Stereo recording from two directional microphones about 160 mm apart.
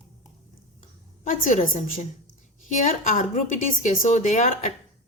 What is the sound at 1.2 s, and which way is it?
Speech, 50° left (ahead or behind).